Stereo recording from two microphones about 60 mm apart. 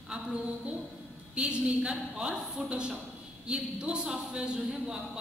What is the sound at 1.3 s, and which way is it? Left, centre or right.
A woman's voice, centre.